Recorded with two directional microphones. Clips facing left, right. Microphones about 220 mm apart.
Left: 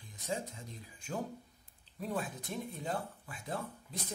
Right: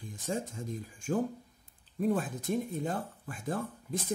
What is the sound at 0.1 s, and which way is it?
Speech, 45° right (ahead or behind).